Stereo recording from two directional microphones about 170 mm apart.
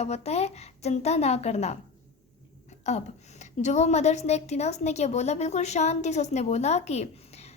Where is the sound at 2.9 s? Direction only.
40° left (ahead or behind).